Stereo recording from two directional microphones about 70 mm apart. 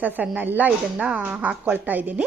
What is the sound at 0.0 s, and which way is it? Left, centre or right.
A woman's voice, right.